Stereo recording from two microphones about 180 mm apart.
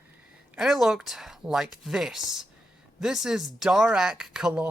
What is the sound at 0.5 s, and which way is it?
Speech, centre (ahead or behind).